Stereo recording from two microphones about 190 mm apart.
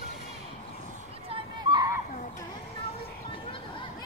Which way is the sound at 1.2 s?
25° right (ahead or behind).